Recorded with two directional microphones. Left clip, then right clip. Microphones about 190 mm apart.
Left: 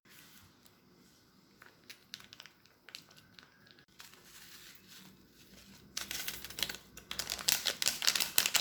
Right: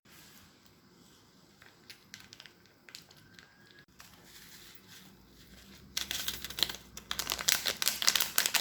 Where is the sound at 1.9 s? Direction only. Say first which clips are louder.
Left 1 dB; 10° left (ahead or behind).